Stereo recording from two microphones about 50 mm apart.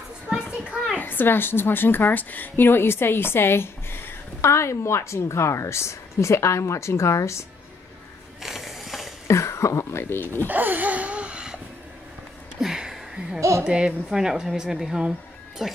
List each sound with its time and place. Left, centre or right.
0.3 s children playing: centre
0.9 s a woman's voice: left
4.4 s a woman's voice: left
8.4 s ratchet: centre
9.3 s a sound: left
10.0 s a woman's voice: left
10.5 s a sound: right
12.5 s a sound: centre
13.4 s speech: right
13.7 s speech: centre